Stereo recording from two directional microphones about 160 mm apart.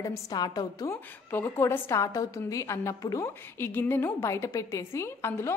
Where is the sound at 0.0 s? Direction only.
20° left (ahead or behind).